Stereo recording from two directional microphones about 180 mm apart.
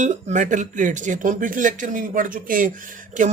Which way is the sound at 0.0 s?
45° right (ahead or behind).